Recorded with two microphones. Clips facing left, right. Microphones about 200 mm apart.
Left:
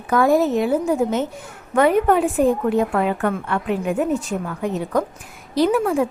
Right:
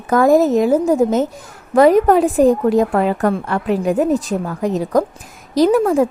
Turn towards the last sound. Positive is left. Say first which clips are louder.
# right 5 dB
turn(degrees=-40)  # may be behind; listen again after turning